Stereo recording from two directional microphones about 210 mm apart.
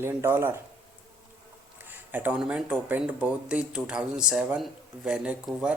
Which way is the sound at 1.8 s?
10° right (ahead or behind).